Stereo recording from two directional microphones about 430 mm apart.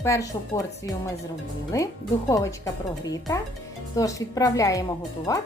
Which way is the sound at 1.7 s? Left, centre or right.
Centre.